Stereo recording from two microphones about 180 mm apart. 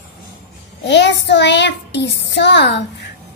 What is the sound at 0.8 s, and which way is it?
A child's voice, 75° left (ahead or behind).